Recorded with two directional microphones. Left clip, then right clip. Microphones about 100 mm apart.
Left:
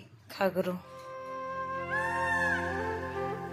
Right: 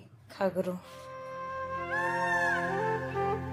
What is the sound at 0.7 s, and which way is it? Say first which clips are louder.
Music: left 1 dB; centre (ahead or behind).